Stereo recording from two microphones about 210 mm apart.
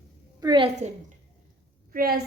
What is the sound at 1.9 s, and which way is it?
Speech, 45° right (ahead or behind).